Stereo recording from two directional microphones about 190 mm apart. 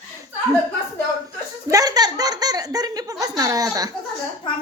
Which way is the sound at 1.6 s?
20° right (ahead or behind).